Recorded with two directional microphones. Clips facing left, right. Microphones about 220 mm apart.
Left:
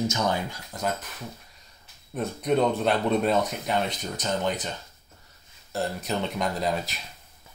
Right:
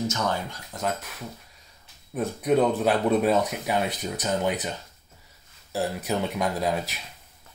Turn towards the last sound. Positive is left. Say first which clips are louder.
# right 1 dB
turn(degrees=-5)  # may be behind; listen again after turning